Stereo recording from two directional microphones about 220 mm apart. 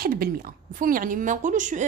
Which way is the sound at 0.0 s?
40° right (ahead or behind).